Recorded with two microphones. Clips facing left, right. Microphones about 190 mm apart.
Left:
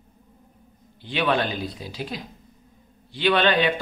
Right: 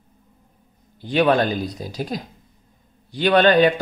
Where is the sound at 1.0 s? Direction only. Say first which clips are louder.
Right 6 dB; 45° right (ahead or behind).